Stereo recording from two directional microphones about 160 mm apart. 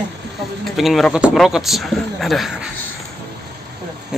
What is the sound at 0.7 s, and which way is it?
A man's voice, centre (ahead or behind).